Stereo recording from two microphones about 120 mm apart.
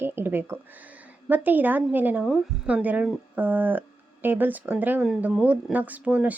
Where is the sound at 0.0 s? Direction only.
20° right (ahead or behind).